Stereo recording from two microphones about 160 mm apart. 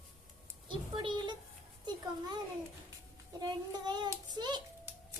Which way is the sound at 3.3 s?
25° right (ahead or behind).